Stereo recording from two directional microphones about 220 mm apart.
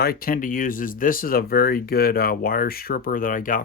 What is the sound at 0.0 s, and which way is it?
Speech, 45° left (ahead or behind).